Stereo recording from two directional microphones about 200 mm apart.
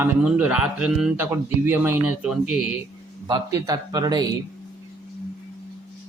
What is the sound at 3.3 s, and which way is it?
Speech, 15° right (ahead or behind).